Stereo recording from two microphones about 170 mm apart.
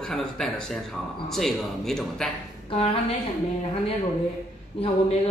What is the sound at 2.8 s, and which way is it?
Speech, 35° left (ahead or behind).